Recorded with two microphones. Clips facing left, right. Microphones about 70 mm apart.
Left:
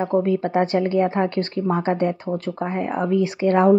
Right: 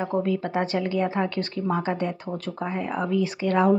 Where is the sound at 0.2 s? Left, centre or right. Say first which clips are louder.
Left 5 dB; left.